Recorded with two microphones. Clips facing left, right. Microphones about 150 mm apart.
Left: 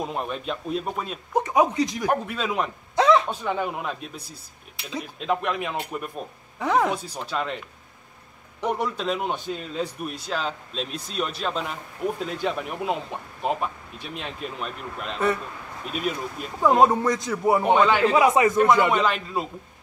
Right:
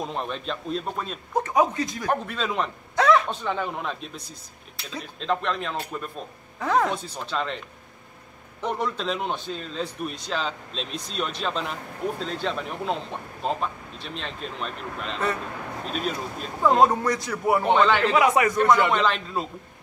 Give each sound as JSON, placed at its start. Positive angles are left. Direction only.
{"t": 0.0, "sound": "speech", "side_deg": 5}
{"t": 1.3, "sound": "speech", "side_deg": 20}
{"t": 2.2, "sound": "speech", "side_deg": 5}
{"t": 3.0, "sound": "a sound", "side_deg": 25}
{"t": 3.3, "sound": "a man's voice", "side_deg": 10}
{"t": 17.0, "sound": "a man's voice", "side_deg": 20}
{"t": 17.6, "sound": "speech", "side_deg": 10}
{"t": 18.6, "sound": "speech", "side_deg": 10}